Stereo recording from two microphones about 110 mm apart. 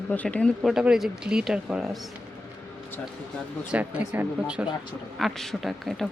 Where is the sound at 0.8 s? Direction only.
5° right (ahead or behind).